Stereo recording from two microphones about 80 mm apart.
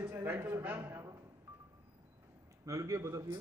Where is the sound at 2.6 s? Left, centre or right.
Right.